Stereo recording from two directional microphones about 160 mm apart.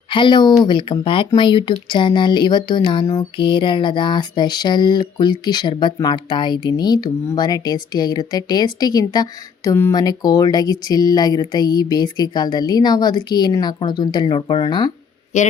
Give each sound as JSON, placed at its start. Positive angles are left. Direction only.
{"t": 0.1, "sound": "speech", "side_deg": 30}
{"t": 15.3, "sound": "speech", "side_deg": 50}